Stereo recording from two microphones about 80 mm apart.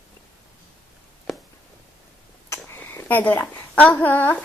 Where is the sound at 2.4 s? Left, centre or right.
Left.